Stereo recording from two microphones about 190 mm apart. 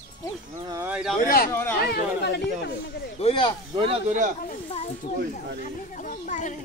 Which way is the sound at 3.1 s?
30° left (ahead or behind).